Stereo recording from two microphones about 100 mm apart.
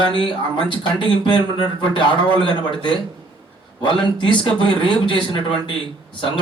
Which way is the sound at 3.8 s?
50° left (ahead or behind).